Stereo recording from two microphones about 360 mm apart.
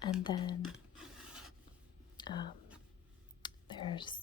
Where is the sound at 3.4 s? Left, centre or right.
Centre.